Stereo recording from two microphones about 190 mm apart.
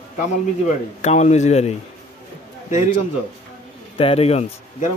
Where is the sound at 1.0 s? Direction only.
40° left (ahead or behind).